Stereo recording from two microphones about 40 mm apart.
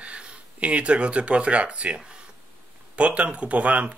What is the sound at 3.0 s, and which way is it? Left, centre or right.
Speech, right.